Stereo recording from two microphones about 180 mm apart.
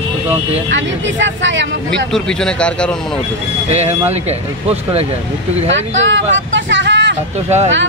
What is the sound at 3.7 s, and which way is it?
Speech, 35° right (ahead or behind).